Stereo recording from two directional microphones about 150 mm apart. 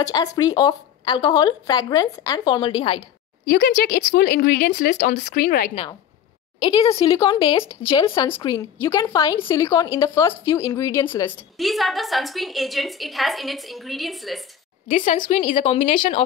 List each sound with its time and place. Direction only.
0.0 s speech: 25° left (ahead or behind)
3.4 s a woman's voice: 85° left
4.9 s speech: 55° left (ahead or behind)
5.2 s speech: 75° left (ahead or behind)
6.6 s speech: 30° left (ahead or behind)
11.5 s a woman's voice: centre (ahead or behind)
15.0 s speech: 55° left (ahead or behind)
15.2 s speech: 40° left (ahead or behind)